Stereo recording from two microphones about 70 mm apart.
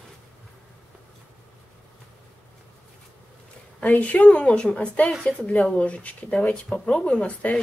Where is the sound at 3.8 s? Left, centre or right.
Centre.